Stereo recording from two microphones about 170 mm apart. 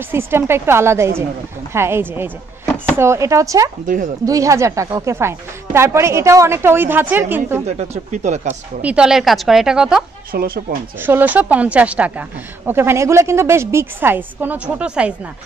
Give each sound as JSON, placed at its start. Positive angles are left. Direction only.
{"t": 0.1, "sound": "a woman's voice", "side_deg": -15}
{"t": 3.8, "sound": "speech", "side_deg": -50}
{"t": 4.3, "sound": "a woman's voice", "side_deg": -20}
{"t": 7.6, "sound": "speech", "side_deg": -40}
{"t": 8.8, "sound": "a woman's voice", "side_deg": -5}
{"t": 10.3, "sound": "speech", "side_deg": -60}
{"t": 11.0, "sound": "a woman's voice", "side_deg": -10}